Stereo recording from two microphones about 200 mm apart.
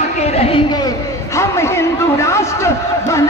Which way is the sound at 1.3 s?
15° left (ahead or behind).